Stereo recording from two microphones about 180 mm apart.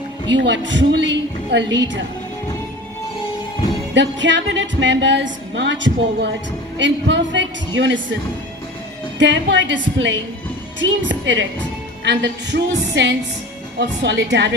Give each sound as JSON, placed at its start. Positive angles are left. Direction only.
{"t": 0.3, "sound": "a woman's voice", "side_deg": -85}
{"t": 3.9, "sound": "a woman's voice", "side_deg": -90}
{"t": 9.2, "sound": "a woman's voice", "side_deg": -90}
{"t": 12.0, "sound": "a woman's voice", "side_deg": -75}